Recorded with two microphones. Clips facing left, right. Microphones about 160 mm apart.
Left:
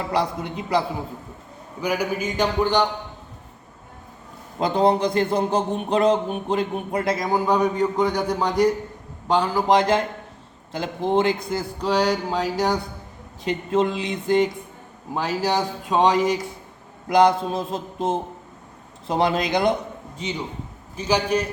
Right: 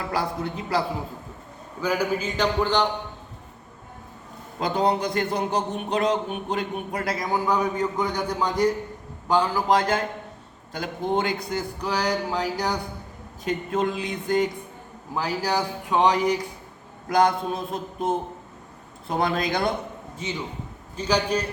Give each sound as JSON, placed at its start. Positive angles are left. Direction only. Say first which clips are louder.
{"t": 0.1, "sound": "a man's voice", "louder": "left 2 dB", "side_deg": 20}
{"t": 1.8, "sound": "speech", "louder": "even", "side_deg": 15}
{"t": 4.6, "sound": "a man's voice", "louder": "left 4 dB", "side_deg": 30}
{"t": 20.9, "sound": "speech", "louder": "left 2 dB", "side_deg": 10}